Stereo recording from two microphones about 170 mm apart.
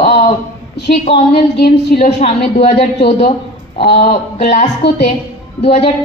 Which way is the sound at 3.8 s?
70° left (ahead or behind).